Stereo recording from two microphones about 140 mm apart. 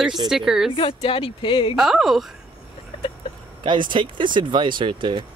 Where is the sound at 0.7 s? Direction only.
40° left (ahead or behind).